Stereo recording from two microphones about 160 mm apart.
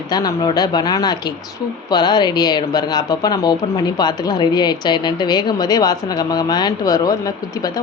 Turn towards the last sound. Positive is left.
turn(degrees=25)  # may be behind; listen again after turning